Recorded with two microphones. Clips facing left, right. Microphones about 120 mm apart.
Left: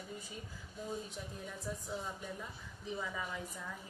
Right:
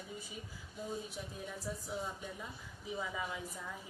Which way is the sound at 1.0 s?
5° right (ahead or behind).